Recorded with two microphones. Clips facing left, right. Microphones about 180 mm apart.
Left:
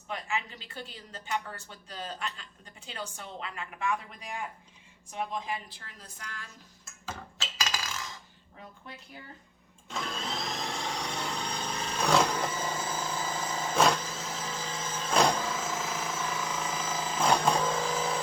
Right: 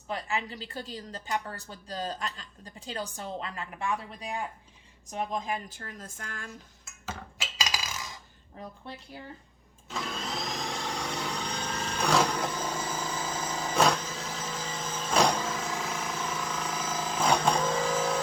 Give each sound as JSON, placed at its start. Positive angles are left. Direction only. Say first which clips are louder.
{"t": 0.1, "sound": "a woman's voice", "louder": "right 2 dB", "side_deg": -35}
{"t": 5.1, "sound": "a woman's voice", "louder": "right 2 dB", "side_deg": -45}
{"t": 7.0, "sound": "coin", "louder": "right 1 dB", "side_deg": -10}
{"t": 8.6, "sound": "a woman's voice", "louder": "right 6 dB", "side_deg": -40}
{"t": 9.9, "sound": "a sound", "louder": "right 1 dB", "side_deg": 0}